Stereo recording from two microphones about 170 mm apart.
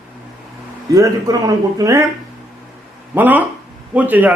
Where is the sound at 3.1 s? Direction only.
10° right (ahead or behind).